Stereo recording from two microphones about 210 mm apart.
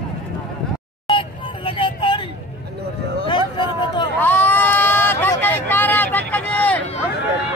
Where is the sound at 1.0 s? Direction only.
25° left (ahead or behind).